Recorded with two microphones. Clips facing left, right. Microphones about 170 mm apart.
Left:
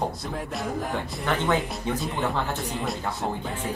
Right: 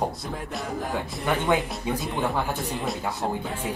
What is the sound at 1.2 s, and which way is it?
Music, 5° right (ahead or behind).